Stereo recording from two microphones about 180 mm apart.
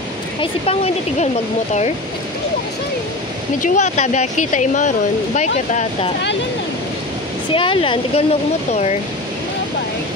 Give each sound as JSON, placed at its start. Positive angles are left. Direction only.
{"t": 0.4, "sound": "speech", "side_deg": 35}
{"t": 3.6, "sound": "speech", "side_deg": 40}
{"t": 7.5, "sound": "speech", "side_deg": 30}